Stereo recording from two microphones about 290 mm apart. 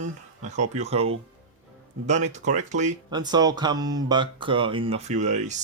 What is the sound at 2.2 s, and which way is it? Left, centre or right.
Speech, right.